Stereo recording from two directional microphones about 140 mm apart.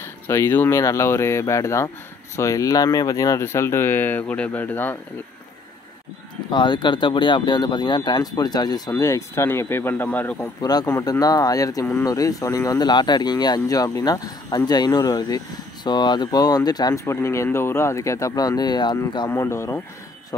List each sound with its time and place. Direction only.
0.0 s speech: 20° left (ahead or behind)
6.5 s speech: 35° left (ahead or behind); by 10.5 s 10° left (ahead or behind)
10.6 s speech: 30° left (ahead or behind)
19.3 s speech: 20° left (ahead or behind)